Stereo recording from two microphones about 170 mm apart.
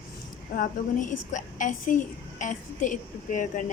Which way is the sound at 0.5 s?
50° left (ahead or behind).